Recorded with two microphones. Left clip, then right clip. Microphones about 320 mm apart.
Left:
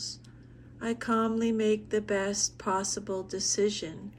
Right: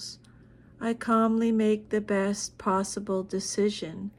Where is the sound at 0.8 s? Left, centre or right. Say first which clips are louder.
Right 4 dB; centre.